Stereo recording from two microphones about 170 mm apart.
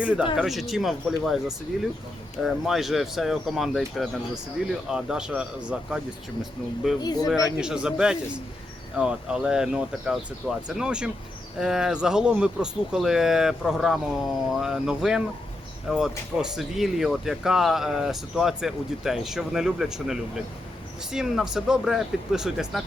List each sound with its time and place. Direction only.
0.0 s speech: 5° right (ahead or behind)
7.0 s speech: 25° left (ahead or behind)
7.4 s speech: 5° right (ahead or behind)